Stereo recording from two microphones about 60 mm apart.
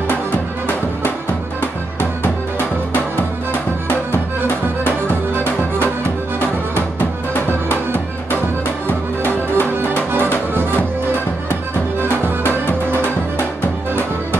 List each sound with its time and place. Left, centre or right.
7.0 s music: left
8.8 s music: left